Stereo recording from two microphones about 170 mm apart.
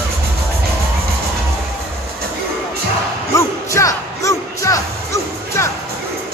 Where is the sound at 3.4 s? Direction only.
20° left (ahead or behind).